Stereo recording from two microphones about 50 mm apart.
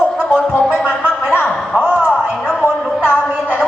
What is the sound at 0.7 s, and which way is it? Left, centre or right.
Music, right.